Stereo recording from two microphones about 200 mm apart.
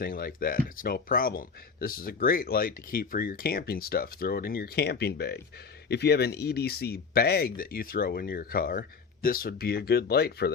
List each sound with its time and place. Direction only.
0.0 s speech: 50° left (ahead or behind)